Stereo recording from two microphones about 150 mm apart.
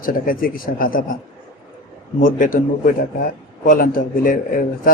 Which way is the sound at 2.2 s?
60° left (ahead or behind).